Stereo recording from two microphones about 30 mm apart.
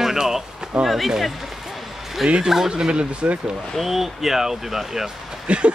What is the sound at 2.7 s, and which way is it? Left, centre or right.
Speech, right.